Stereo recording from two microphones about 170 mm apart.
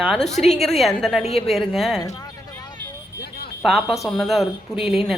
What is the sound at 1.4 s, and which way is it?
Speech, centre (ahead or behind).